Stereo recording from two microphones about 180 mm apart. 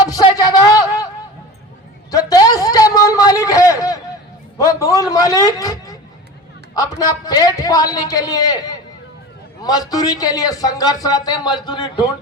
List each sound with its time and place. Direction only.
0.1 s a man's voice: 20° left (ahead or behind)
2.0 s a sound: 20° left (ahead or behind)
6.7 s speech: 20° left (ahead or behind)
9.6 s speech: 20° left (ahead or behind)